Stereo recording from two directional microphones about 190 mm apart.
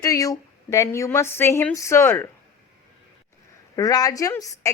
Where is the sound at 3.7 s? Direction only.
20° left (ahead or behind).